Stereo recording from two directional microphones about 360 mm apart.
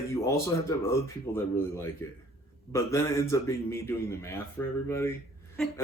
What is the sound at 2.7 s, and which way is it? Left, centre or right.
A woman's voice, centre.